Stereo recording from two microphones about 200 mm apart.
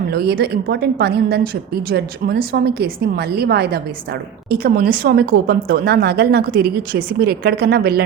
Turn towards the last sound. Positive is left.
turn(degrees=-50)  # may be behind; listen again after turning